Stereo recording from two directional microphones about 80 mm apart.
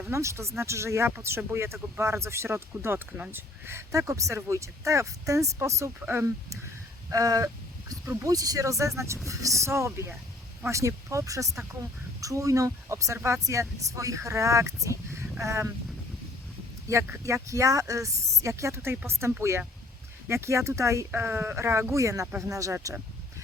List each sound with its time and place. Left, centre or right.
0.1 s speech: right
3.1 s speech: centre
3.7 s speech: right
7.1 s a sound: right
8.2 s speech: right
16.9 s speech: right
21.1 s speech: right